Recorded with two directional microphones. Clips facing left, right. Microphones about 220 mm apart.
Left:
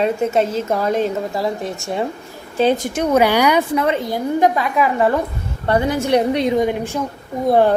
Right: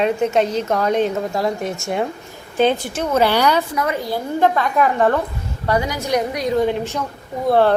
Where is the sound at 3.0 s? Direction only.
15° left (ahead or behind).